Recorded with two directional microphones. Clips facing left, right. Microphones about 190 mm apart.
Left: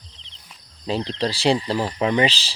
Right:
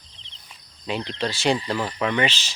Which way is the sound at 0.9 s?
35° left (ahead or behind).